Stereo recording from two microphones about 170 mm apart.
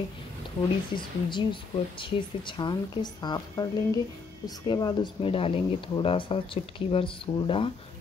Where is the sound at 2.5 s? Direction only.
25° left (ahead or behind).